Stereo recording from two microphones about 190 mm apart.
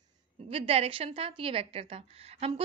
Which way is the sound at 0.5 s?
30° right (ahead or behind).